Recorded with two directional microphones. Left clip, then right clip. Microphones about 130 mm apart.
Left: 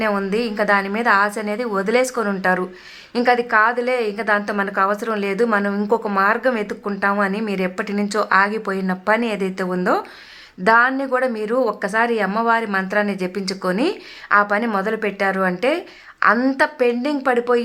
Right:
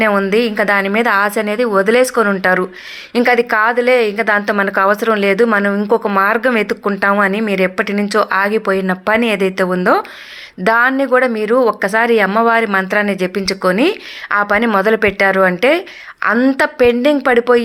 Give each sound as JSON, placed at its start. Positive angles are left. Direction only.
{"t": 0.0, "sound": "a woman's voice", "side_deg": -30}
{"t": 5.7, "sound": "a woman's voice", "side_deg": -15}
{"t": 6.0, "sound": "a woman's voice", "side_deg": -30}